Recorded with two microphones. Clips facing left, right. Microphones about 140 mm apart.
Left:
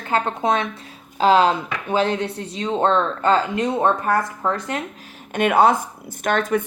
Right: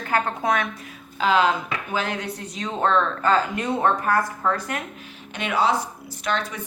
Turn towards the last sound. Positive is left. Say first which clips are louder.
# left 7 dB
turn(degrees=50)  # may be behind; listen again after turning